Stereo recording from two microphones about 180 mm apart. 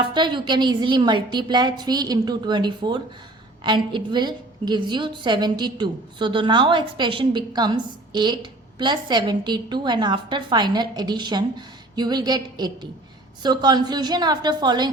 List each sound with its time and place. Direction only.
0.0 s a woman's voice: 25° right (ahead or behind)